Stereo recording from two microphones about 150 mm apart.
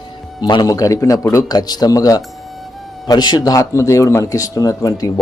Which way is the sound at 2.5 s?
Centre (ahead or behind).